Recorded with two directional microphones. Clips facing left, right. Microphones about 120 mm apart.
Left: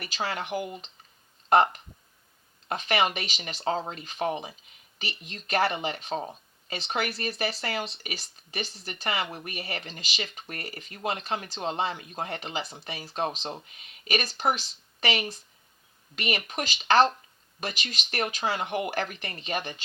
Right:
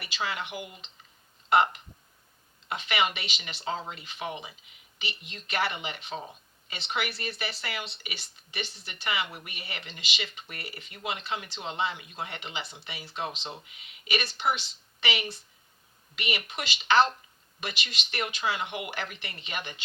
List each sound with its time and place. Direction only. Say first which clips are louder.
0.0 s speech: left 2 dB; 40° left (ahead or behind)